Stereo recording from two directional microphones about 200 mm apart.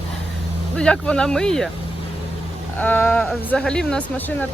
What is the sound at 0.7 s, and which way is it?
Speech, 5° left (ahead or behind).